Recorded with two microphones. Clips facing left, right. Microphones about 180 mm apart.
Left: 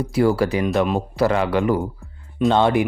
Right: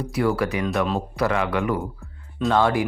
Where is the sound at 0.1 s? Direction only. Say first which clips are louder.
Left 4 dB; 30° left (ahead or behind).